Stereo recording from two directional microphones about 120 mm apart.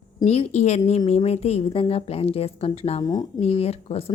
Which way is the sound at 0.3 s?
65° left (ahead or behind).